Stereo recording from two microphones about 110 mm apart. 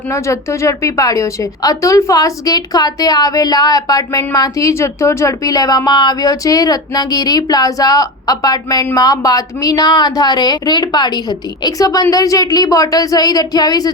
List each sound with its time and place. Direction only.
0.1 s speech: 25° left (ahead or behind)